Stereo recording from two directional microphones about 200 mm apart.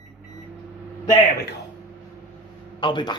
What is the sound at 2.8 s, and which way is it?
Speech, 25° left (ahead or behind).